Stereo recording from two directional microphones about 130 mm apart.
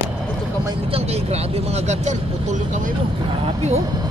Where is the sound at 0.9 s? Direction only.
55° right (ahead or behind).